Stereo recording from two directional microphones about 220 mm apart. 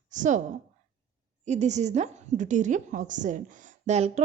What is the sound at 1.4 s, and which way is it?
A woman's voice, 30° right (ahead or behind).